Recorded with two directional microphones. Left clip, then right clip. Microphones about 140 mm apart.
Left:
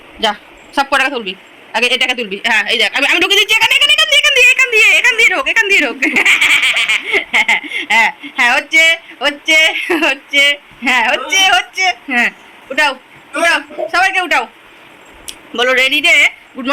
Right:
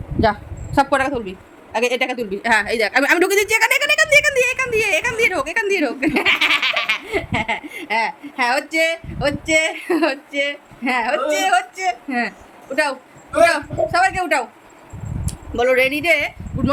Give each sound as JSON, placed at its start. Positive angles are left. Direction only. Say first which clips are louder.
{"t": 0.2, "sound": "a sound", "louder": "left 2 dB", "side_deg": -40}
{"t": 0.9, "sound": "a woman's voice", "louder": "left 6 dB", "side_deg": -20}
{"t": 2.4, "sound": "speech", "louder": "left 4 dB", "side_deg": -40}
{"t": 4.4, "sound": "a woman's voice", "louder": "left 9 dB", "side_deg": -15}